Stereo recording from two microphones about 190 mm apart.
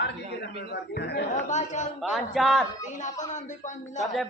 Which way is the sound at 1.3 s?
40° left (ahead or behind).